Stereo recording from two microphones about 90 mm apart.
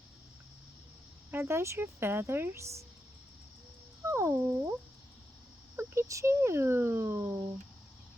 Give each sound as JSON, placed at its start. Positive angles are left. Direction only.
{"t": 1.3, "sound": "speech", "side_deg": -25}
{"t": 4.0, "sound": "a sound", "side_deg": -30}
{"t": 5.7, "sound": "speech", "side_deg": -30}